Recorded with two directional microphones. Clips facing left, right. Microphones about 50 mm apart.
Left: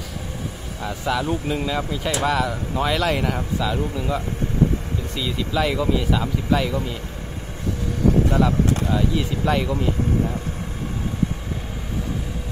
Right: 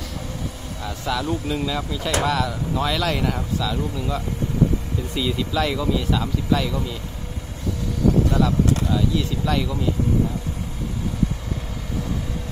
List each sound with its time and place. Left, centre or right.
0.8 s speech: centre
5.1 s speech: centre
5.5 s a man's voice: centre
8.3 s speech: left